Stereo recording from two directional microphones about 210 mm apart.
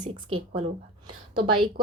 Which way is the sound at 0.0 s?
25° right (ahead or behind).